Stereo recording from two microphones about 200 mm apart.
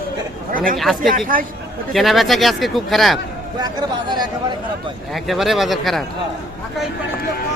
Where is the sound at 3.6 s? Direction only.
20° right (ahead or behind).